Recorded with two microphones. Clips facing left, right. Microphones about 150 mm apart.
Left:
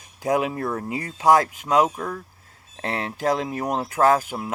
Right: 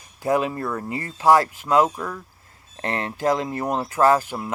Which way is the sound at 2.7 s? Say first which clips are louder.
Right 1 dB; centre (ahead or behind).